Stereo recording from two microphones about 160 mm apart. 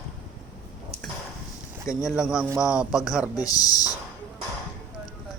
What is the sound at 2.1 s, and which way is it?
Speech, 5° right (ahead or behind).